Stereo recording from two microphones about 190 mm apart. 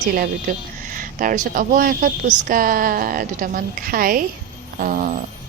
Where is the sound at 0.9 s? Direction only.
45° right (ahead or behind).